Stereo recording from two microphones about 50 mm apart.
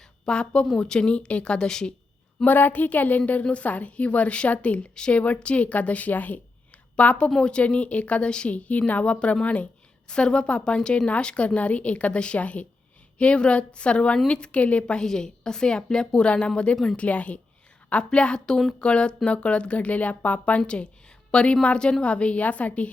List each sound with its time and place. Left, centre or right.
0.3 s a woman's voice: centre
2.4 s a woman's voice: left
8.5 s a woman's voice: left
15.0 s a woman's voice: centre